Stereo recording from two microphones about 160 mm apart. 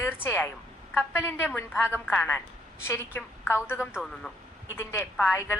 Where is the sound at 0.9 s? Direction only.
15° left (ahead or behind).